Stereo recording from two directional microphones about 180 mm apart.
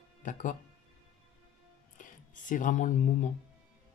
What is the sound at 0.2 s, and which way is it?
Speech, 45° left (ahead or behind).